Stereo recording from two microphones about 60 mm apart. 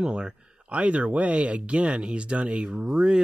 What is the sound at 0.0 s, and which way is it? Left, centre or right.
Speech, centre.